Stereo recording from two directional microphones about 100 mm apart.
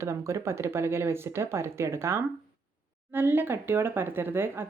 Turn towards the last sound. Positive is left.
turn(degrees=-20)  # may be behind; listen again after turning